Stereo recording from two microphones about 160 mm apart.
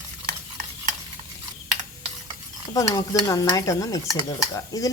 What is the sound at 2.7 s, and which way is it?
Speech, 20° left (ahead or behind).